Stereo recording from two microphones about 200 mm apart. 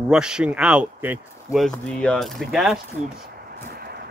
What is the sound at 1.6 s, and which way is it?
Speech, 5° left (ahead or behind).